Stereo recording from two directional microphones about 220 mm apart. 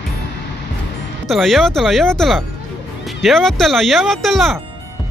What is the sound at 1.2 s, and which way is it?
Speech, centre (ahead or behind).